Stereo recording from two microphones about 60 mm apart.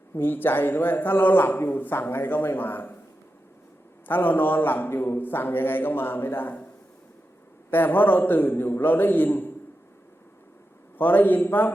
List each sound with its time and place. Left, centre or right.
0.1 s a man's voice: left
4.0 s a man's voice: left
7.7 s a man's voice: left
10.9 s a man's voice: left